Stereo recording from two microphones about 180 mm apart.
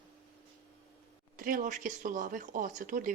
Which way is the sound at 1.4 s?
50° right (ahead or behind).